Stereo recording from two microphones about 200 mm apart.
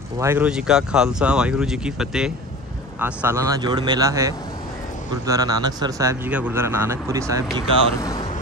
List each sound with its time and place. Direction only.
0.2 s speech: 10° right (ahead or behind)